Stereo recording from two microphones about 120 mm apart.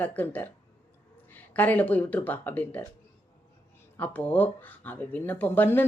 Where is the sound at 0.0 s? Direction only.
15° left (ahead or behind).